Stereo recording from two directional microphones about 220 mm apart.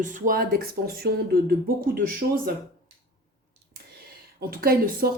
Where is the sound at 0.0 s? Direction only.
40° right (ahead or behind).